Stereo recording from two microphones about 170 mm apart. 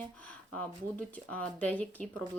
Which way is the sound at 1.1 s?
10° left (ahead or behind).